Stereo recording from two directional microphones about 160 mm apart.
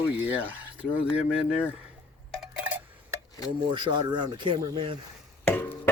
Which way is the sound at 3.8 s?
30° right (ahead or behind).